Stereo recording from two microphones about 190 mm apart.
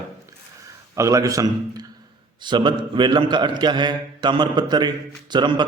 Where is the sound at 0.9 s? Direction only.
15° right (ahead or behind).